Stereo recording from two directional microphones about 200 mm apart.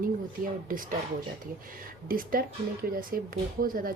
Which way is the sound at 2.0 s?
45° right (ahead or behind).